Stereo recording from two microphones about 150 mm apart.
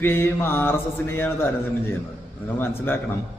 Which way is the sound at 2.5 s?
15° left (ahead or behind).